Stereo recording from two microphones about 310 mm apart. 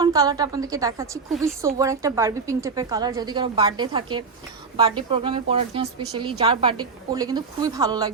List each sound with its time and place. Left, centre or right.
0.0 s a woman's voice: centre